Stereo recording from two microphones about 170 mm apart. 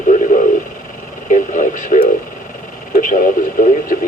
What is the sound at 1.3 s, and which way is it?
Radio, 50° left (ahead or behind).